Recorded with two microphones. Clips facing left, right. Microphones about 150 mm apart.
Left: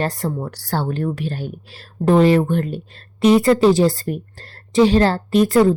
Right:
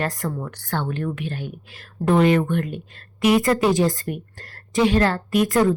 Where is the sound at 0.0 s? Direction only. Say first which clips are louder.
Left 4 dB; 30° left (ahead or behind).